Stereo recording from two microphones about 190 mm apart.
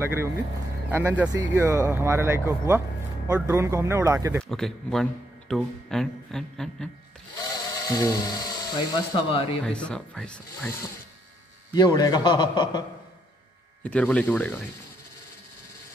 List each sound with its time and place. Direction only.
0.0 s speech: 10° right (ahead or behind)
4.4 s speech: centre (ahead or behind)
7.3 s speech: 20° left (ahead or behind)
9.7 s speech: 5° left (ahead or behind)
11.7 s a man's voice: 20° left (ahead or behind)
13.8 s speech: 5° left (ahead or behind)